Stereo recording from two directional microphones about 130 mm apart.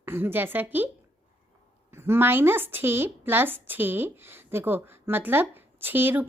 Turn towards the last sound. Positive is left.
turn(degrees=-15)  # may be behind; listen again after turning